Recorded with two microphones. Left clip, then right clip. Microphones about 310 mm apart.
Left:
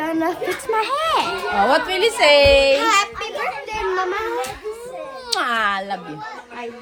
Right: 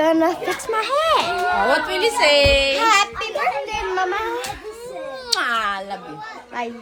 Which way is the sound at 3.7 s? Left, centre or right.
Centre.